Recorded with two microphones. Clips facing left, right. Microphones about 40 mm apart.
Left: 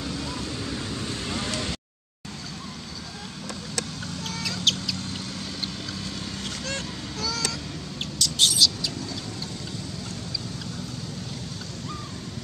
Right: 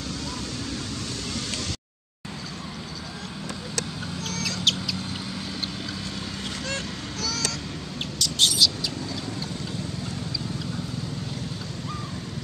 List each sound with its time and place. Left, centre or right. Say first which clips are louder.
1.3 s vehicle: left 4 dB; centre
4.3 s a sound: even; centre
6.7 s honk: right 1 dB; centre
8.2 s bird: even; centre